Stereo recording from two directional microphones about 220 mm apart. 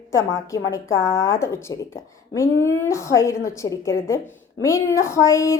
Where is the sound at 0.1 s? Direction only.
15° left (ahead or behind).